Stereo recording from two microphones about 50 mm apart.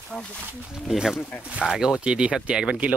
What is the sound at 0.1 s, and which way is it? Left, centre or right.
Speech, centre.